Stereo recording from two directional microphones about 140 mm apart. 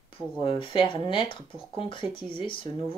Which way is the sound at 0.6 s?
35° left (ahead or behind).